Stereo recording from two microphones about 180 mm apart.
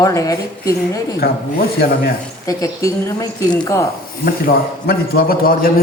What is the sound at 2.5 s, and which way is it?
A woman's voice, 20° left (ahead or behind).